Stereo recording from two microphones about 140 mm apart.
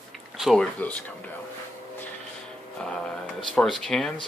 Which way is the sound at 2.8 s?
5° left (ahead or behind).